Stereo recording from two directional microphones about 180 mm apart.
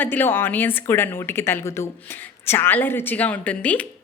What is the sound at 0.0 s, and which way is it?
A woman's voice, 10° left (ahead or behind).